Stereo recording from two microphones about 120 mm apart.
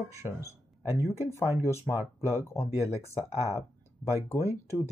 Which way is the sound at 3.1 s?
60° left (ahead or behind).